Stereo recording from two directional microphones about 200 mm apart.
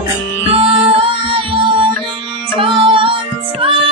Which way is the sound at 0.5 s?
30° right (ahead or behind).